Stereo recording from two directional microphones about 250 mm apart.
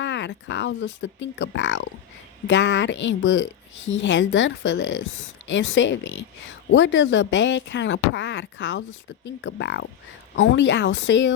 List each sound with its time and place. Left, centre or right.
0.0 s speech: left